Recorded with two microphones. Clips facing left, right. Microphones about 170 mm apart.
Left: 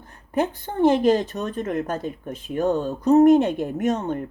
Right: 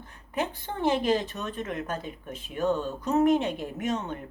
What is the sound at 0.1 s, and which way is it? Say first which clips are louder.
A woman's voice: left 7 dB; 45° left (ahead or behind).